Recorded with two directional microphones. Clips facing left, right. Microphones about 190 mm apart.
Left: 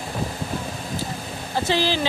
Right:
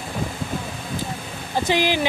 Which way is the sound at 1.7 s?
15° right (ahead or behind).